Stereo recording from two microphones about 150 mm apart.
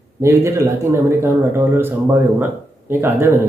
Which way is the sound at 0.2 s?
20° right (ahead or behind).